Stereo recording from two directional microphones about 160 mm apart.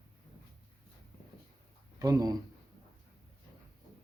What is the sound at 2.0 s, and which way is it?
Speech, 20° right (ahead or behind).